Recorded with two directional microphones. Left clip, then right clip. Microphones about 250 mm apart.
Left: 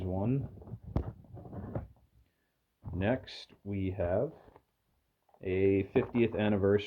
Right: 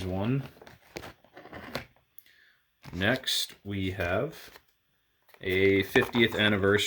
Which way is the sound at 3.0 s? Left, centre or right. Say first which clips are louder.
Right 7 dB; right.